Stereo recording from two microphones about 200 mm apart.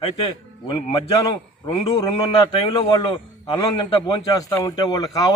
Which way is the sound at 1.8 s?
30° left (ahead or behind).